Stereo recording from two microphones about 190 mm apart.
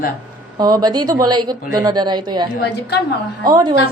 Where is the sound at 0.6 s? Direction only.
20° right (ahead or behind).